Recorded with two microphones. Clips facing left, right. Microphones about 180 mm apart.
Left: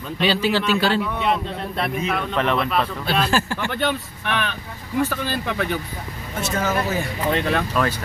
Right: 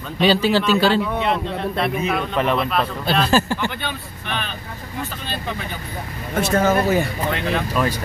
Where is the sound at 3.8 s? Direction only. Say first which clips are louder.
Left 6 dB; 70° left (ahead or behind).